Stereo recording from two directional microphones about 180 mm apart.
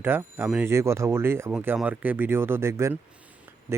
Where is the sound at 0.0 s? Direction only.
10° right (ahead or behind).